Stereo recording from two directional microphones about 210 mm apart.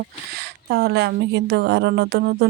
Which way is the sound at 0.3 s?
50° right (ahead or behind).